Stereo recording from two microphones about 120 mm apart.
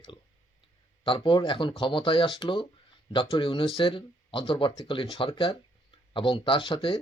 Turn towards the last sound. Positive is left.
turn(degrees=45)  # may be behind; listen again after turning